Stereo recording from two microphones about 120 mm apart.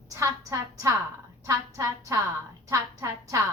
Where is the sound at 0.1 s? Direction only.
25° right (ahead or behind).